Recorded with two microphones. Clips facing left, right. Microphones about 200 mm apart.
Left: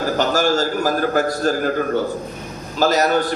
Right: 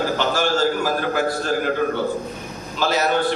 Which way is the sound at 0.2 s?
40° left (ahead or behind).